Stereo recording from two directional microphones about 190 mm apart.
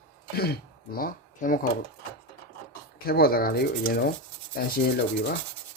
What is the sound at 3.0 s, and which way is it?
Speech, 55° left (ahead or behind).